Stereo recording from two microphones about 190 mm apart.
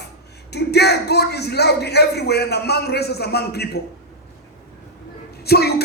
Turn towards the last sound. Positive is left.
turn(degrees=55)  # may be behind; listen again after turning